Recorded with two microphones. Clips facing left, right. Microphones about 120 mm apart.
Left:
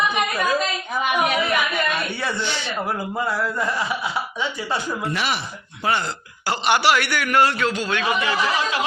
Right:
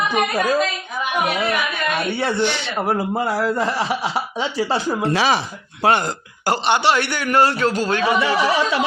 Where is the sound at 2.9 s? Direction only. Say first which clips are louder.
Right 6 dB; 30° right (ahead or behind).